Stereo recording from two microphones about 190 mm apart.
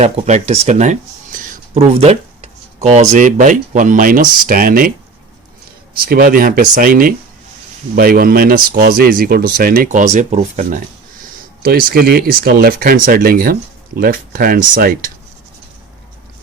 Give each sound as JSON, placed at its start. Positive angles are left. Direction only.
{"t": 0.0, "sound": "speech", "side_deg": -35}
{"t": 5.9, "sound": "speech", "side_deg": -50}
{"t": 11.6, "sound": "speech", "side_deg": -50}